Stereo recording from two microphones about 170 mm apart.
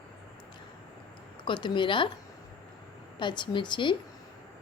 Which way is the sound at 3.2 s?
25° left (ahead or behind).